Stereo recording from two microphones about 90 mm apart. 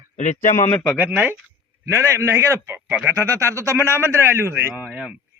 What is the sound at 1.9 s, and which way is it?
A man's voice, 30° right (ahead or behind).